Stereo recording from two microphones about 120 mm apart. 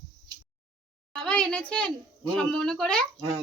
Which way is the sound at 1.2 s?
5° left (ahead or behind).